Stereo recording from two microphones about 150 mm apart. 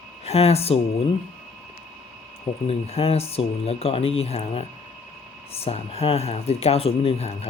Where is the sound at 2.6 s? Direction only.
40° left (ahead or behind).